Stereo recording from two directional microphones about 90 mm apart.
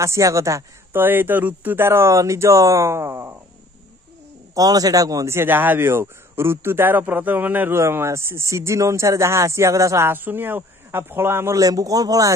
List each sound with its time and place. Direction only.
0.0 s speech: 35° right (ahead or behind)
0.9 s a man's voice: 25° right (ahead or behind)
4.6 s a man's voice: 45° right (ahead or behind); by 11.6 s 30° right (ahead or behind)
11.6 s speech: 40° right (ahead or behind)